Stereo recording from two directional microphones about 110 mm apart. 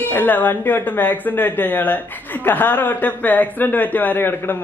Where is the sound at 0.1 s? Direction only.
15° left (ahead or behind).